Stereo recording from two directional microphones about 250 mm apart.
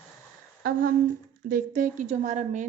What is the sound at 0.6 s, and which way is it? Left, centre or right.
Humming, right.